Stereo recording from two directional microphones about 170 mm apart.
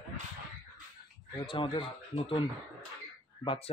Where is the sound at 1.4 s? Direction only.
30° left (ahead or behind).